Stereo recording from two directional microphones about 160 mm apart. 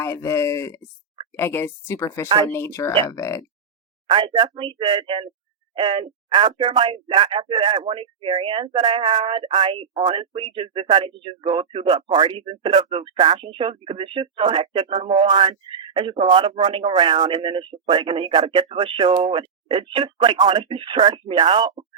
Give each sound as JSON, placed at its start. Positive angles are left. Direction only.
{"t": 0.0, "sound": "speech", "side_deg": 15}
{"t": 4.0, "sound": "speech", "side_deg": -30}